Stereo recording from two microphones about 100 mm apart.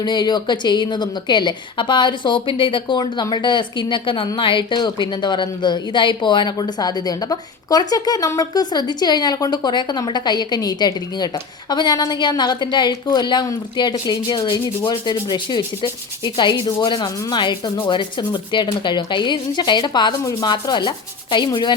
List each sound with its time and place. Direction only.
0.0 s sanding: 45° left (ahead or behind)